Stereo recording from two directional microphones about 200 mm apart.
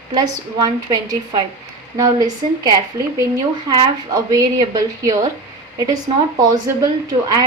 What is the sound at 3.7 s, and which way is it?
A woman's voice, 20° right (ahead or behind).